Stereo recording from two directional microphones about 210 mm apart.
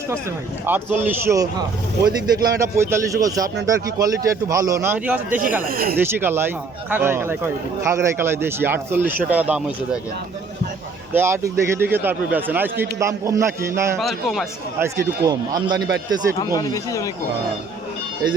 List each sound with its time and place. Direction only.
0.6 s speech: 10° right (ahead or behind)
5.6 s speech: 45° right (ahead or behind)
6.0 s speech: 10° right (ahead or behind)
11.1 s speech: 10° right (ahead or behind)
14.0 s speech: centre (ahead or behind)
14.9 s a man's voice: 15° right (ahead or behind)
16.4 s speech: 20° left (ahead or behind)